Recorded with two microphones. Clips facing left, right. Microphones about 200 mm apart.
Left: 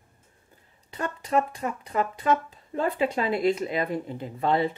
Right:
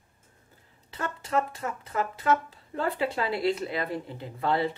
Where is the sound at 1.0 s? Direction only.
15° left (ahead or behind).